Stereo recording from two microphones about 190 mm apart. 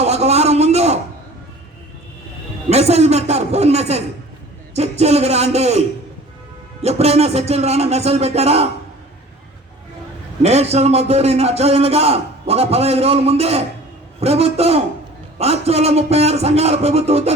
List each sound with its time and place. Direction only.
0.0 s a sound: 35° right (ahead or behind)
2.6 s a man's voice: 35° right (ahead or behind)
6.8 s a man's voice: 35° right (ahead or behind)
10.4 s a man's voice: 35° right (ahead or behind)